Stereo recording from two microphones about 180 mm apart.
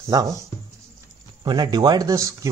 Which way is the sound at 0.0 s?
20° right (ahead or behind).